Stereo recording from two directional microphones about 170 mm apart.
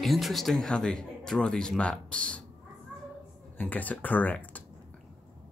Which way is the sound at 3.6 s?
10° left (ahead or behind).